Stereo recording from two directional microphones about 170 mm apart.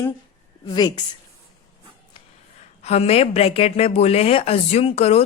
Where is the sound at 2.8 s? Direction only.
40° left (ahead or behind).